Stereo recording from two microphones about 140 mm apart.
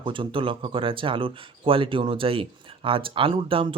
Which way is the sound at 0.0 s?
40° right (ahead or behind).